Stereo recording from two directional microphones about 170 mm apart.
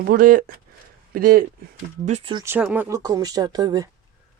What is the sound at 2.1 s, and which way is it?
Speech, 40° right (ahead or behind).